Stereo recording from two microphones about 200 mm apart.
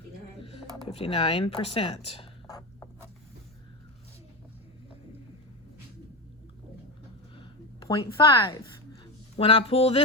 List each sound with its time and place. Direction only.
0.9 s speech: 30° left (ahead or behind)
7.3 s a sound: 20° left (ahead or behind)
9.3 s speech: 30° left (ahead or behind)